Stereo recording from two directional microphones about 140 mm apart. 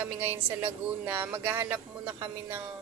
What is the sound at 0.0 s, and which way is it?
Speech, 15° right (ahead or behind).